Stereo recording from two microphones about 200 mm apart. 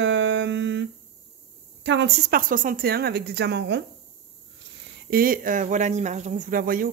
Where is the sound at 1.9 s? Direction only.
60° right (ahead or behind).